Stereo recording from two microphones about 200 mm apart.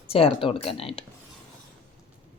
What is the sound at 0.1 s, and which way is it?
Speech, 30° left (ahead or behind).